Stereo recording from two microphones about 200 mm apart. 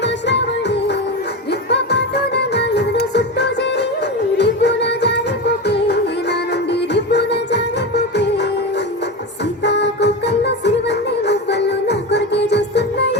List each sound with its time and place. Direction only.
0.0 s music: 60° left (ahead or behind)
9.6 s music: 60° left (ahead or behind)